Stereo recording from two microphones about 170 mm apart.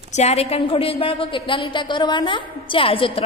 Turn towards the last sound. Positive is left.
turn(degrees=30)  # may be behind; listen again after turning